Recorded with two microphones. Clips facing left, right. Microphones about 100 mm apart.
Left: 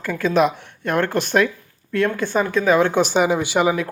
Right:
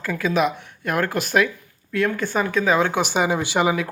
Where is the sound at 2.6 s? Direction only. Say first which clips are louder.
Left 4 dB; 15° right (ahead or behind).